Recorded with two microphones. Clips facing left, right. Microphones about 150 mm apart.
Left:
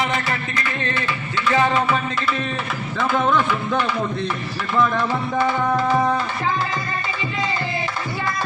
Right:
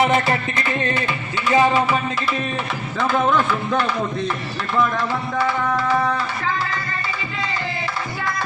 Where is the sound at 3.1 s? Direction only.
5° right (ahead or behind).